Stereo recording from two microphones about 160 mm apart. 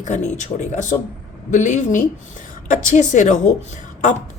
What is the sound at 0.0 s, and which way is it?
A woman's voice, 50° left (ahead or behind).